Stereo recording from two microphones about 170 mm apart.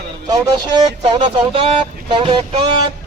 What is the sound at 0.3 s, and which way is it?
Speech, 25° right (ahead or behind).